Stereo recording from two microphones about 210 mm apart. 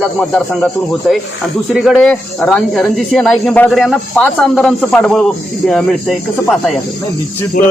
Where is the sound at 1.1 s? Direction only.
5° right (ahead or behind).